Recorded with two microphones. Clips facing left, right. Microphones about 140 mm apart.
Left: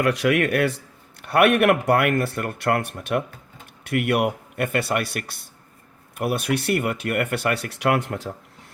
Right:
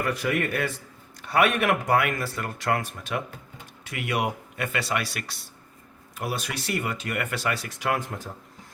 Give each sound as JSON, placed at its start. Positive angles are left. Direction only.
{"t": 0.0, "sound": "speech", "side_deg": 75}